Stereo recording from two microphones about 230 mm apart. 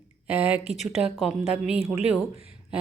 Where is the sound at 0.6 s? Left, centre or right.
Left.